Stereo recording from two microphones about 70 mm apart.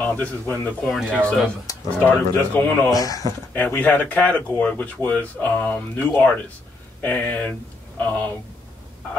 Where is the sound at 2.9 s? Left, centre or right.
Left.